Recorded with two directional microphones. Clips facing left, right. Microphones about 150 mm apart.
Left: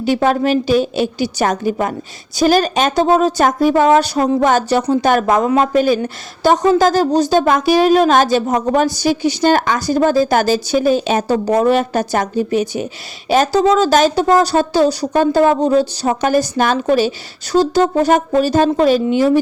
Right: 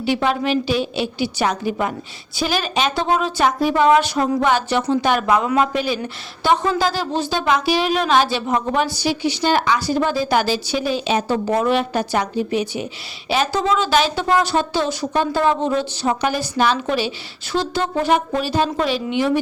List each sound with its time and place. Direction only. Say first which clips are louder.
0.0 s a woman's voice: left 5 dB; 45° left (ahead or behind)